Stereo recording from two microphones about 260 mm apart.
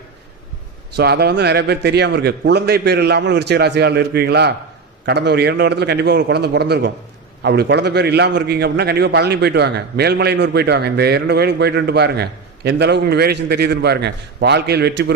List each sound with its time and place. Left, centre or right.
0.9 s a man's voice: right